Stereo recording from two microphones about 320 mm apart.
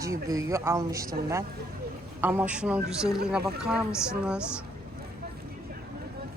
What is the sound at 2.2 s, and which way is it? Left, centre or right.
Speech, centre.